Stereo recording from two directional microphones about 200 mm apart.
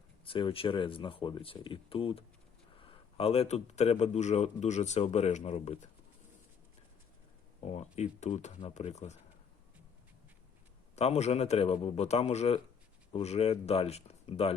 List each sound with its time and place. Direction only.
0.3 s a man's voice: 25° left (ahead or behind)
7.6 s a man's voice: 35° left (ahead or behind)
10.9 s a man's voice: 35° left (ahead or behind)